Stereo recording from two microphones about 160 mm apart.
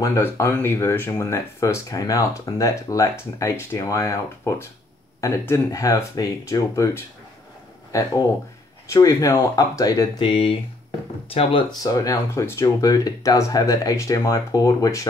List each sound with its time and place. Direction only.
0.0 s speech: 15° left (ahead or behind)
10.2 s speech: 35° left (ahead or behind)
11.8 s speech: 20° left (ahead or behind)